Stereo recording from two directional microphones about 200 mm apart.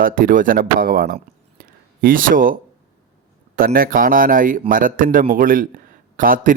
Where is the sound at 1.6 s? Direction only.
45° right (ahead or behind).